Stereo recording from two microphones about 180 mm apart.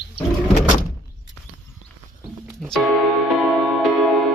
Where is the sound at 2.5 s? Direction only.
5° left (ahead or behind).